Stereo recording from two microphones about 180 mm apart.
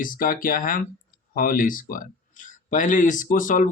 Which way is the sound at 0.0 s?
50° left (ahead or behind).